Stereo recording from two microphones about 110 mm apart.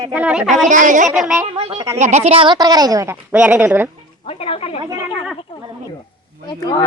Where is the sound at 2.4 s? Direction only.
40° right (ahead or behind); by 3.9 s 20° right (ahead or behind).